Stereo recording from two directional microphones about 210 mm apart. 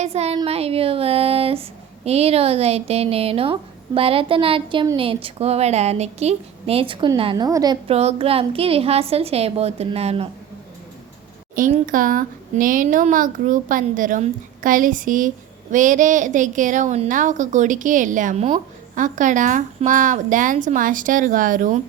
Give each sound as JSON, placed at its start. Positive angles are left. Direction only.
{"t": 0.0, "sound": "speech", "side_deg": -30}
{"t": 0.3, "sound": "a sound", "side_deg": -30}
{"t": 2.0, "sound": "a woman's voice", "side_deg": -30}
{"t": 11.5, "sound": "speech", "side_deg": -40}